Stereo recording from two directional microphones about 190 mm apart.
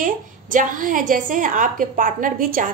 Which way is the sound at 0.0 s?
45° right (ahead or behind).